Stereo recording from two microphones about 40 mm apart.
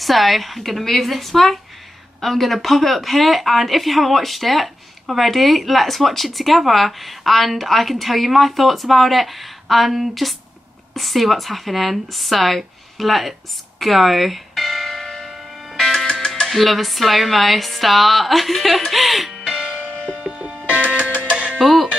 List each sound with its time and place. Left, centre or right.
0.0 s a woman's voice: centre
13.7 s church bell: centre
20.2 s music: right
20.6 s music: right
20.9 s music: right
21.5 s music: centre